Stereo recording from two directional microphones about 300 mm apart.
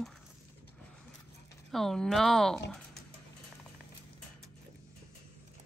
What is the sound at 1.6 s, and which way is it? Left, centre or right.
Speech, centre.